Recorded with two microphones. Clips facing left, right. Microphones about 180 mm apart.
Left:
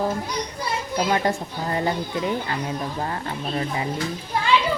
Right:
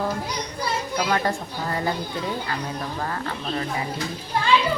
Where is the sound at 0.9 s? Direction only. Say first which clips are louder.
Left 3 dB; 20° left (ahead or behind).